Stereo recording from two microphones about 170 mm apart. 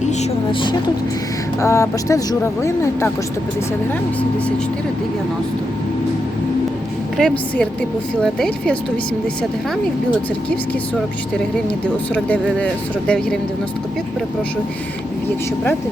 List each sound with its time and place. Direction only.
1.6 s speech: 15° left (ahead or behind)
7.2 s speech: 5° left (ahead or behind)
12.1 s speech: 5° left (ahead or behind)